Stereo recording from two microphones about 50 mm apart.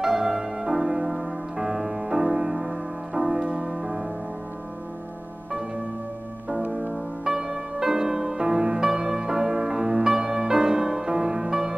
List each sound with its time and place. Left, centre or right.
0.0 s music: centre
6.9 s music: centre